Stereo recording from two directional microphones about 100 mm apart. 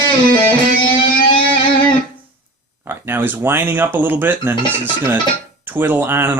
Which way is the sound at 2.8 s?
20° right (ahead or behind).